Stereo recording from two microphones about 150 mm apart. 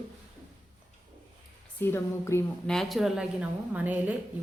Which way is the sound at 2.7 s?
Centre (ahead or behind).